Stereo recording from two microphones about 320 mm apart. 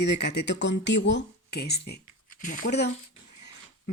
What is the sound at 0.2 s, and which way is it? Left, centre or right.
Speech, left.